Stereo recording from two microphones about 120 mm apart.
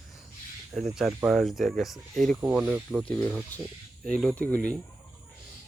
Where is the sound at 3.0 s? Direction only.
10° left (ahead or behind).